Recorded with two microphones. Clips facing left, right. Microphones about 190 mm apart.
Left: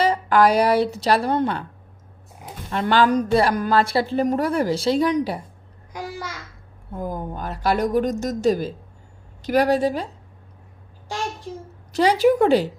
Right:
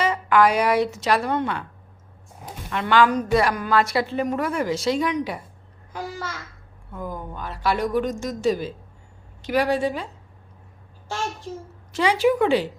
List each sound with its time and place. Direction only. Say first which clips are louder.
0.0 s speech: left 2 dB; 35° left (ahead or behind)
2.6 s speech: left 1 dB; 35° left (ahead or behind)
5.9 s babbling: even; 15° left (ahead or behind)
6.9 s speech: left 4 dB; 40° left (ahead or behind)
11.1 s a sound: left 1 dB; 15° left (ahead or behind)
11.9 s speech: left 3 dB; 40° left (ahead or behind)